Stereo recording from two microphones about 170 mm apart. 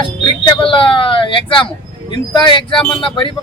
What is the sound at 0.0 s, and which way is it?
Speech, 30° left (ahead or behind).